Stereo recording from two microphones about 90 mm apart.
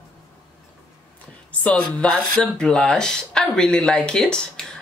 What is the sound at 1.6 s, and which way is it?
Speech, 10° left (ahead or behind).